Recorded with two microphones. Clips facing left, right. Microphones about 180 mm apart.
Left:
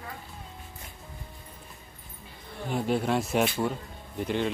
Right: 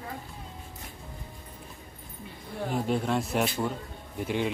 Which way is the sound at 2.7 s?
Centre (ahead or behind).